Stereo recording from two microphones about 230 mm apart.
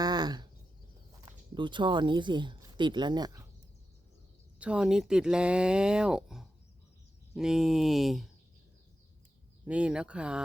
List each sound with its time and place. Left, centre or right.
0.0 s a sound: centre
1.2 s speech: right
4.6 s speech: centre
9.6 s speech: centre